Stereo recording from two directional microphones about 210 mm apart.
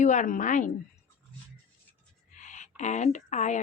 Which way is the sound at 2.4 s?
35° left (ahead or behind).